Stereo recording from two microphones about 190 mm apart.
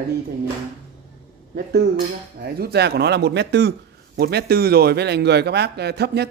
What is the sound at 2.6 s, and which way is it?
Speech, 60° right (ahead or behind).